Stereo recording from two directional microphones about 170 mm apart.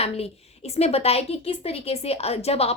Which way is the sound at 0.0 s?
35° left (ahead or behind).